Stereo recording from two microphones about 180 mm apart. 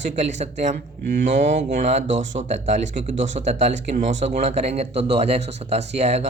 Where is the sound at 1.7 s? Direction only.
40° right (ahead or behind).